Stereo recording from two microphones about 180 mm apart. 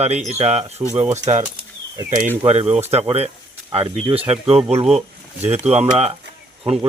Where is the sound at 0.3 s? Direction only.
35° right (ahead or behind).